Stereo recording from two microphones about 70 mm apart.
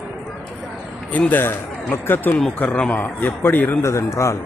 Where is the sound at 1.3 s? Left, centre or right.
Left.